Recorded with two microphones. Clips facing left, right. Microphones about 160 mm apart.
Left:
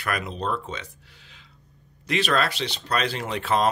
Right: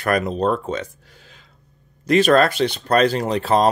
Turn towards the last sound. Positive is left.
turn(degrees=-35)  # may be behind; listen again after turning